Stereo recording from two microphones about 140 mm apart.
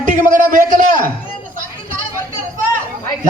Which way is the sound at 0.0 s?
65° right (ahead or behind).